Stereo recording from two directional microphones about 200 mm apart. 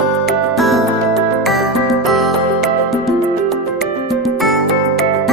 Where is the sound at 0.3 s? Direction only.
Centre (ahead or behind).